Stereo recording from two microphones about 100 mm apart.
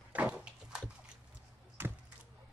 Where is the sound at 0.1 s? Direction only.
15° right (ahead or behind).